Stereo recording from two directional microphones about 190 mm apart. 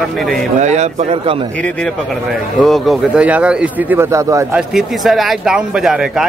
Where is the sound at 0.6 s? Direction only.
35° right (ahead or behind).